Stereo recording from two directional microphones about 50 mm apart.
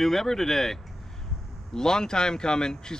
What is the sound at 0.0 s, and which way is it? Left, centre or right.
Speech, centre.